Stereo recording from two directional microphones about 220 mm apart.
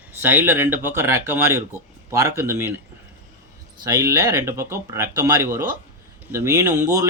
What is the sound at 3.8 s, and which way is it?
Speech, 15° right (ahead or behind).